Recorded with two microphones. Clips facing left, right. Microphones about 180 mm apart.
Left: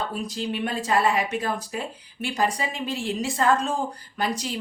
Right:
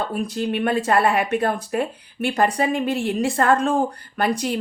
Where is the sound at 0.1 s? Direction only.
55° right (ahead or behind).